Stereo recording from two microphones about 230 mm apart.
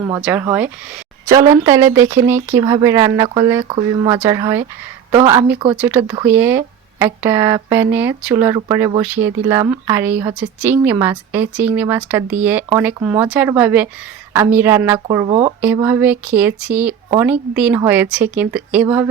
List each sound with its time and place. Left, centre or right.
0.0 s speech: centre